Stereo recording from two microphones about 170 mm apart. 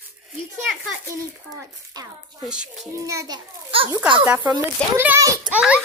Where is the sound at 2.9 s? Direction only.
20° right (ahead or behind).